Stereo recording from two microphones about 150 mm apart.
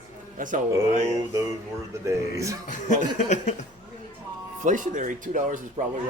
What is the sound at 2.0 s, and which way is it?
Speech, 20° right (ahead or behind).